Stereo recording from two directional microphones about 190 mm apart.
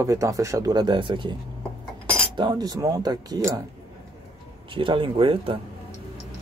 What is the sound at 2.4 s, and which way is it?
Speech, 20° right (ahead or behind).